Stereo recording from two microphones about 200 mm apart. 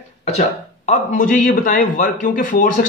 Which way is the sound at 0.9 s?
40° left (ahead or behind).